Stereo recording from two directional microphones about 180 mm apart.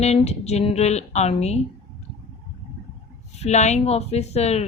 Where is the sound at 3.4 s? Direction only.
40° left (ahead or behind).